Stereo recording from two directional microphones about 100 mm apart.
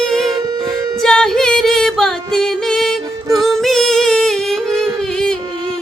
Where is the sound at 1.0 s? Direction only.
5° left (ahead or behind).